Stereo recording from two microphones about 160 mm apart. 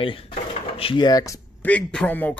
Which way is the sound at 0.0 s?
35° left (ahead or behind).